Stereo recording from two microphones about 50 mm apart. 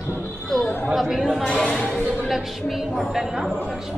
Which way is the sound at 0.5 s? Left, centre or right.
Centre.